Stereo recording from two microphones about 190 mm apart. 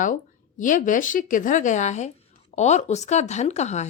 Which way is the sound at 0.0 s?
45° left (ahead or behind).